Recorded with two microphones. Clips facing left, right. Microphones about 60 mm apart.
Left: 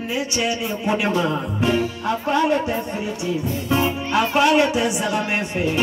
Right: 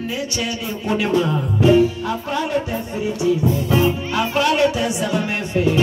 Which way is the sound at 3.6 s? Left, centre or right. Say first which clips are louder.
Left 1 dB; left.